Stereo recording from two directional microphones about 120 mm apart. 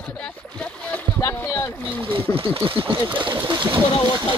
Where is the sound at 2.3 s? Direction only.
50° right (ahead or behind).